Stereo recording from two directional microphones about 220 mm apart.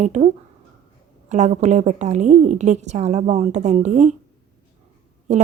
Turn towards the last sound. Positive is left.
turn(degrees=-30)  # may be behind; listen again after turning